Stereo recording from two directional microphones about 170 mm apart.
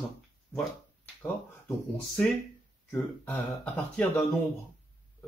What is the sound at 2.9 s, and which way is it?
Speech, 10° left (ahead or behind).